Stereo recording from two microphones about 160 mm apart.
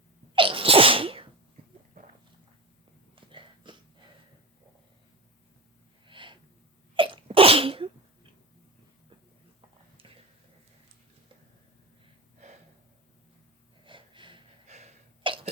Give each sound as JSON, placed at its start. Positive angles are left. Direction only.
{"t": 0.3, "sound": "sneeze", "side_deg": -35}
{"t": 2.0, "sound": "walk", "side_deg": -55}
{"t": 3.2, "sound": "a sound", "side_deg": -30}
{"t": 6.1, "sound": "snort", "side_deg": -30}
{"t": 6.9, "sound": "sneeze", "side_deg": -30}
{"t": 13.8, "sound": "gasp", "side_deg": -30}
{"t": 14.7, "sound": "sneeze", "side_deg": -45}
{"t": 15.2, "sound": "cough", "side_deg": -30}